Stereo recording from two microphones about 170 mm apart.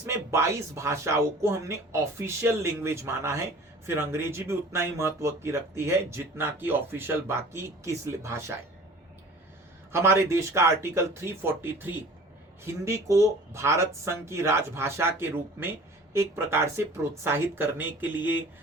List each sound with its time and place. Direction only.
0.0 s speech: 15° right (ahead or behind)
9.9 s speech: 15° right (ahead or behind)